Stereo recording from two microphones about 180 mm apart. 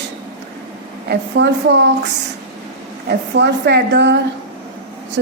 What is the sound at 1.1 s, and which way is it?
Speech, 70° right (ahead or behind).